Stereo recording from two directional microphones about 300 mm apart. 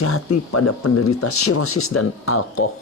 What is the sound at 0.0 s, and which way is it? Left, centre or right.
Speech, left.